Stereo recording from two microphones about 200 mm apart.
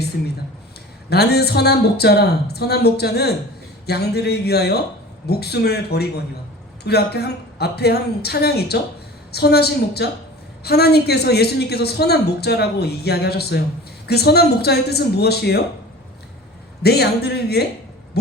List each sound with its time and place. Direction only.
1.1 s a woman's voice: 55° left (ahead or behind)
16.8 s a woman's voice: 55° left (ahead or behind)